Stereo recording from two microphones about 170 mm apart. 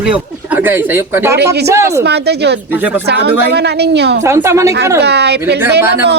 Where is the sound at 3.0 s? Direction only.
75° right (ahead or behind).